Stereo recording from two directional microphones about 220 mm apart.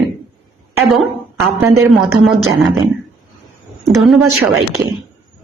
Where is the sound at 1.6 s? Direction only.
15° right (ahead or behind).